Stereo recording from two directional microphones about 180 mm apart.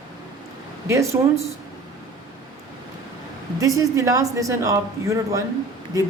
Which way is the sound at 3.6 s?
20° right (ahead or behind).